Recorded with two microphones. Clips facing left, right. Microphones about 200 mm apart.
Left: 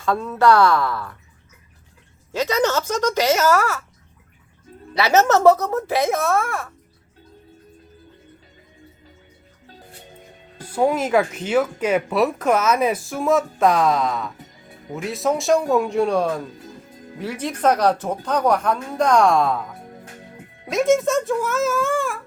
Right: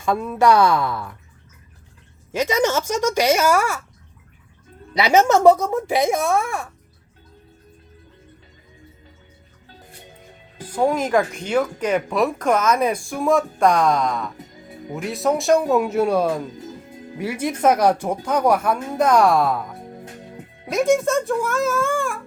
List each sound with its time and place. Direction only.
0.0 s speech: 15° right (ahead or behind)
2.3 s speech: 15° right (ahead or behind)
4.9 s speech: 15° right (ahead or behind)
10.7 s speech: 5° left (ahead or behind)
20.7 s speech: centre (ahead or behind)